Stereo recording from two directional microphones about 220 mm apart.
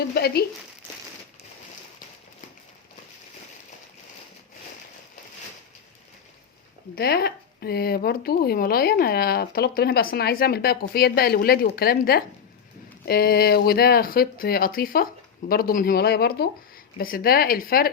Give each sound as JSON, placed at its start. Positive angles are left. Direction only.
{"t": 0.1, "sound": "speech", "side_deg": 45}
{"t": 6.9, "sound": "speech", "side_deg": 45}